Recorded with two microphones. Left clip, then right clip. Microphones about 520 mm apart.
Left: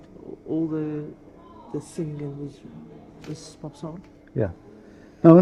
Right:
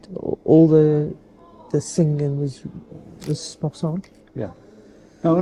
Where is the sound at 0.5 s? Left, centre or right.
Right.